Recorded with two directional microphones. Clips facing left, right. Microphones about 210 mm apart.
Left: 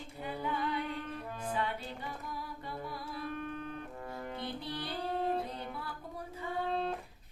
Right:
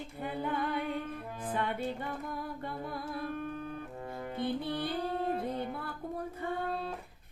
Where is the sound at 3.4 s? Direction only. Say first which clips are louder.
Right 2 dB; 5° right (ahead or behind).